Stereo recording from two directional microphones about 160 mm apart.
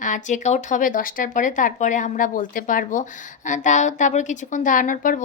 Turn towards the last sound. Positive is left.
turn(degrees=55)  # may be behind; listen again after turning